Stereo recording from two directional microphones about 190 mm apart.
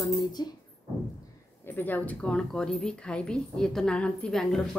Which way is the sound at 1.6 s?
10° left (ahead or behind).